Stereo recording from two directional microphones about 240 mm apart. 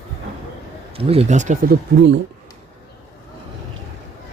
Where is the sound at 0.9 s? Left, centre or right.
Right.